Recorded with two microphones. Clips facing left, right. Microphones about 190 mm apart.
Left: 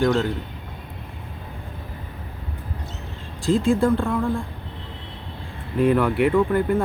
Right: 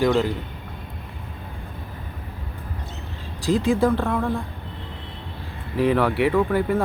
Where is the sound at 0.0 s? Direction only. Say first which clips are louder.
Right 1 dB; 5° right (ahead or behind).